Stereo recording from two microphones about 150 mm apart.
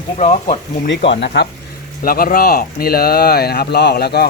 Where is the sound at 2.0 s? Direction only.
75° left (ahead or behind).